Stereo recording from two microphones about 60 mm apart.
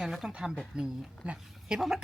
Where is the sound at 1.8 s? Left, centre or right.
Centre.